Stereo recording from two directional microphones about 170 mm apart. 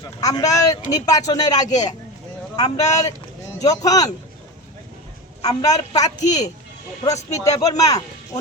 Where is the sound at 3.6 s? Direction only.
20° left (ahead or behind).